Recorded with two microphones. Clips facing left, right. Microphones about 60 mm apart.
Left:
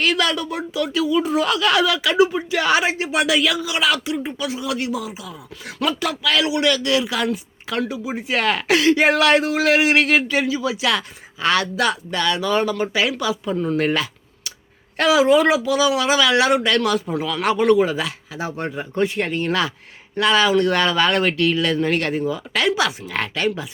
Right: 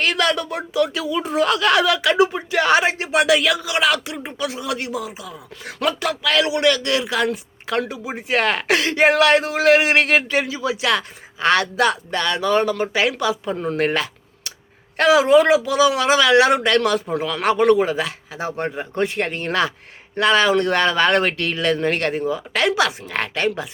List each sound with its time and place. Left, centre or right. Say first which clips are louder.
0.0 s speech: even; right
19.0 s speech: left 3 dB; right
22.6 s speech: right 1 dB; right
23.0 s speech: even; right